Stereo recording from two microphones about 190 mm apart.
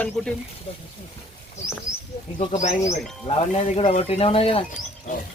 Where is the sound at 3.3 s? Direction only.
30° left (ahead or behind).